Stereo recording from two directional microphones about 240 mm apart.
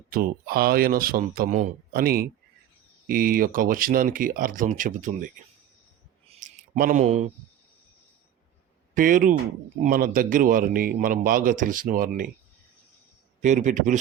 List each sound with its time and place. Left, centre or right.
0.1 s a man's voice: right
6.2 s a sound: right
6.7 s a man's voice: right
9.0 s a man's voice: right
13.4 s a man's voice: right